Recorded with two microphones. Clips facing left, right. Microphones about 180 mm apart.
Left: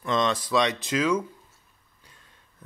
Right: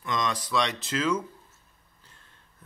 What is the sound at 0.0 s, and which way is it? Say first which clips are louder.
Speech: left 5 dB; 30° left (ahead or behind).